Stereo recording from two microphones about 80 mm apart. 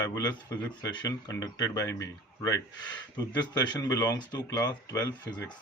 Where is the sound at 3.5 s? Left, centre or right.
Left.